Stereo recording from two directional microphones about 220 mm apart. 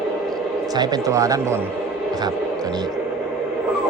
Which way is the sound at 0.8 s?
15° right (ahead or behind).